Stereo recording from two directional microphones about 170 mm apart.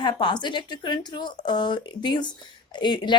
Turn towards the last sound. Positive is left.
turn(degrees=25)  # may be behind; listen again after turning